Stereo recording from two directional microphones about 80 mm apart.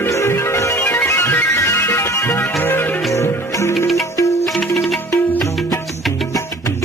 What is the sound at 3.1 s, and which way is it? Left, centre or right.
Music, left.